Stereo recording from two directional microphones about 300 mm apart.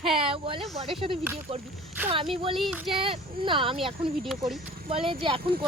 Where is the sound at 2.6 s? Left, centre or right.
Centre.